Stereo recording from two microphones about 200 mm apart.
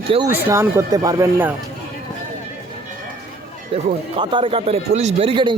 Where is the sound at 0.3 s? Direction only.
10° right (ahead or behind).